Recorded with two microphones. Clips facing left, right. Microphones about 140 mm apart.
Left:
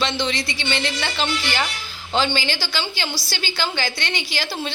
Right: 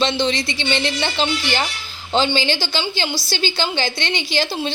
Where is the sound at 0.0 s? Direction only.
25° right (ahead or behind).